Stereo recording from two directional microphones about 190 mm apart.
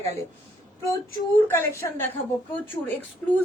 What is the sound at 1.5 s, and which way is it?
A woman's voice, 10° left (ahead or behind).